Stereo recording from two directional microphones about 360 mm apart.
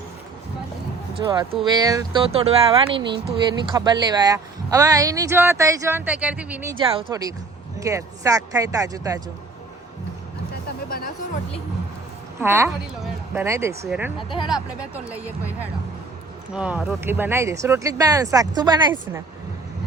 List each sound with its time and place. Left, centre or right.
1.2 s speech: centre
10.8 s music: left
12.4 s speech: centre
14.2 s speech: centre
16.6 s speech: centre